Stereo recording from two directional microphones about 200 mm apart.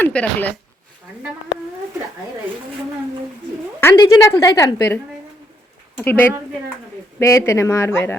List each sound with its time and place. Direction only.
0.0 s speech: 10° left (ahead or behind)
3.8 s a woman's voice: 15° left (ahead or behind)
6.0 s speech: 10° left (ahead or behind)